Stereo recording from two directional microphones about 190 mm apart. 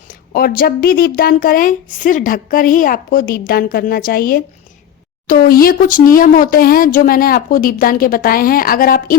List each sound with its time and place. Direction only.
0.1 s speech: 50° left (ahead or behind)